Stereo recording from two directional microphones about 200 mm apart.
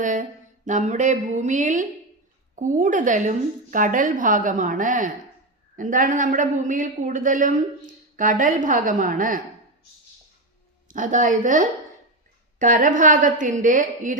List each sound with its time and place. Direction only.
0.0 s a woman's voice: 40° right (ahead or behind)
10.8 s a woman's voice: 40° right (ahead or behind)